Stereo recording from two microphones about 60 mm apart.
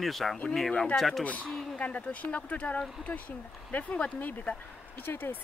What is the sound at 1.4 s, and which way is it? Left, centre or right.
Speech, centre.